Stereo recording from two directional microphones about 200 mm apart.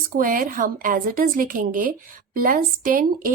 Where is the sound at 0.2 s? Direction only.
45° right (ahead or behind).